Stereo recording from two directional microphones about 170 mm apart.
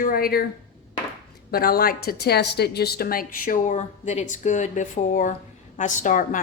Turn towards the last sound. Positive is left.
turn(degrees=50)  # may be behind; listen again after turning